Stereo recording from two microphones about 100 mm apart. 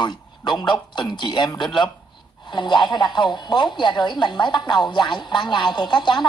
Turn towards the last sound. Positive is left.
turn(degrees=45)  # may be behind; listen again after turning